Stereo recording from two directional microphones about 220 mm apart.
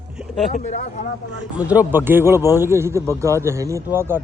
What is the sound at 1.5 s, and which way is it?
A man's voice, 5° right (ahead or behind).